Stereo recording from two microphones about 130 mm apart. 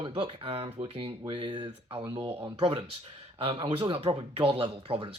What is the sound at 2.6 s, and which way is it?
Speech, 50° right (ahead or behind).